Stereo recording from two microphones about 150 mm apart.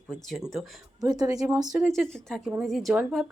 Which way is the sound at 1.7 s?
Centre (ahead or behind).